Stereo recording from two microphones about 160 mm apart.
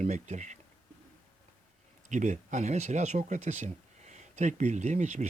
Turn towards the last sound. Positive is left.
turn(degrees=-45)  # may be behind; listen again after turning